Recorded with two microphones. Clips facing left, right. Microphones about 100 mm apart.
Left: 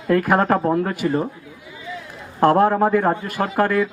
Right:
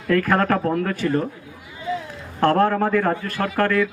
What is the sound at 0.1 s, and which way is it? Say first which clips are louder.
A man's voice: left 2 dB; 20° left (ahead or behind).